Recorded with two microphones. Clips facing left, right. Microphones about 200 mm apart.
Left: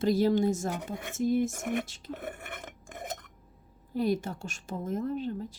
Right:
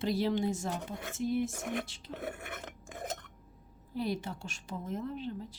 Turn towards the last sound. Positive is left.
turn(degrees=45)  # may be behind; listen again after turning